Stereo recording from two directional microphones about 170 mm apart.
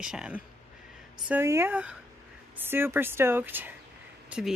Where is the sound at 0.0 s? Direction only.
5° right (ahead or behind).